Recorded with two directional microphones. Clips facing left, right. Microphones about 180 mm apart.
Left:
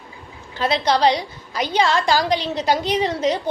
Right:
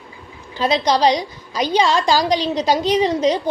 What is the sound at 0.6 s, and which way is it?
Speech, 20° right (ahead or behind).